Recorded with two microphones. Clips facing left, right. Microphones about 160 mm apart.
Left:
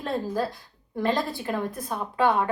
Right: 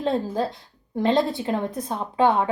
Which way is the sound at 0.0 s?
25° right (ahead or behind).